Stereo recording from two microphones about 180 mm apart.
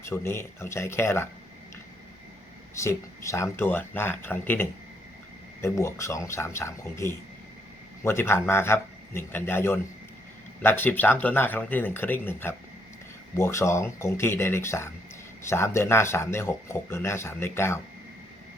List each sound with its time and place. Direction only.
0.0 s speech: 15° left (ahead or behind)
2.7 s speech: 15° left (ahead or behind)